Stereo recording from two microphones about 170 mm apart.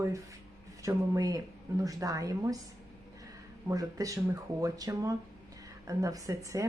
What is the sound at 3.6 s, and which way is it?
Speech, 20° right (ahead or behind).